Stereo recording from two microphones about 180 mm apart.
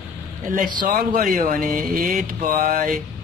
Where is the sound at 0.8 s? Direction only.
50° right (ahead or behind).